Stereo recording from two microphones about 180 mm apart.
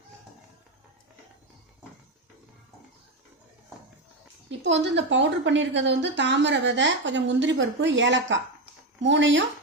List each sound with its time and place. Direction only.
4.6 s speech: 80° right